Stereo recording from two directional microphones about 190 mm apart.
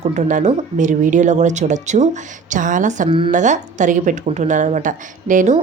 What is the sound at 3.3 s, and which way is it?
Speech, 40° right (ahead or behind).